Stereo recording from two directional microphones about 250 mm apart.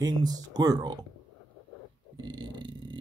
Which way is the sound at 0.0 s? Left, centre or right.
Centre.